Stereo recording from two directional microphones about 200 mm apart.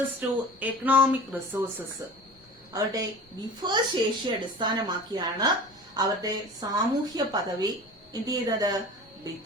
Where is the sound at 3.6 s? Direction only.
20° right (ahead or behind).